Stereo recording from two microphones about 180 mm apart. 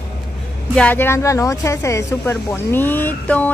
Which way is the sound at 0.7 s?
10° left (ahead or behind).